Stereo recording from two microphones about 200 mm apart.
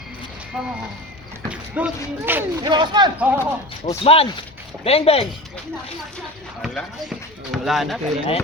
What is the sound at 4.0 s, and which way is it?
Speech, 30° left (ahead or behind).